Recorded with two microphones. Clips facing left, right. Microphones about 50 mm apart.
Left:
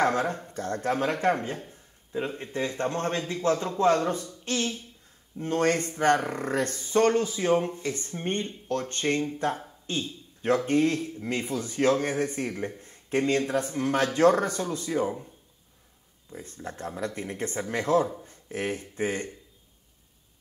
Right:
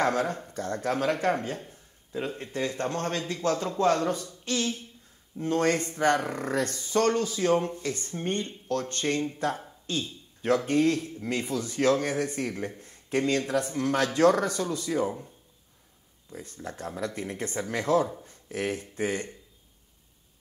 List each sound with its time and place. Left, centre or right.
0.1 s speech: left
6.2 s speech: centre
6.5 s speech: left
9.8 s a sound: left
10.6 s speech: centre
12.8 s a sound: left
13.7 s speech: centre
14.9 s speech: centre
16.3 s speech: left